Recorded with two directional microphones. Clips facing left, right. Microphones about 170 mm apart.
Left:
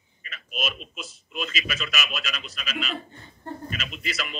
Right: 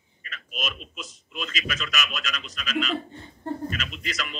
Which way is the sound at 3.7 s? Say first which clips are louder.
Right 1 dB; 10° left (ahead or behind).